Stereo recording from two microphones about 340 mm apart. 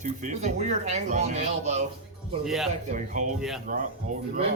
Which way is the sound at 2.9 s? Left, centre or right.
Right.